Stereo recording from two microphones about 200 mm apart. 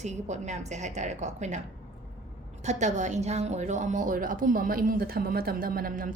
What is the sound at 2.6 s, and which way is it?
A woman's voice, 35° right (ahead or behind).